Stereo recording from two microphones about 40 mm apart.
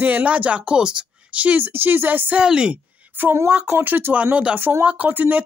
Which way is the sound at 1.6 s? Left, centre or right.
Right.